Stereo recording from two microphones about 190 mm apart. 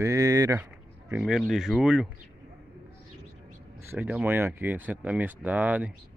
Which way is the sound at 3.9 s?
10° right (ahead or behind).